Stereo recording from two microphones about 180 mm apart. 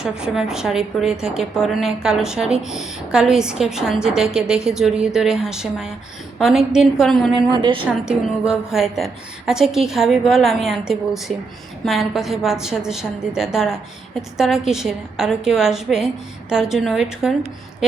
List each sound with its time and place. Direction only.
0.0 s a woman's voice: 5° right (ahead or behind)
7.3 s a woman's voice: 25° right (ahead or behind)
8.0 s a woman's voice: 5° right (ahead or behind)